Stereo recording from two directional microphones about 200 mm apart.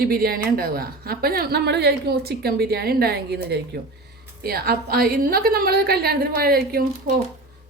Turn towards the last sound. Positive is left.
turn(degrees=-50)  # may be behind; listen again after turning